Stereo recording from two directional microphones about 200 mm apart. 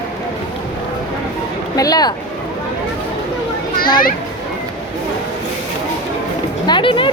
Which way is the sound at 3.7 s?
45° left (ahead or behind).